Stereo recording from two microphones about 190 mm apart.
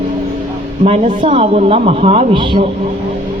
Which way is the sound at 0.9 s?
35° right (ahead or behind).